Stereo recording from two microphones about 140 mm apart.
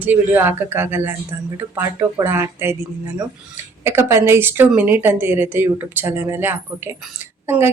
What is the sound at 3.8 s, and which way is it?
Speech, 20° right (ahead or behind).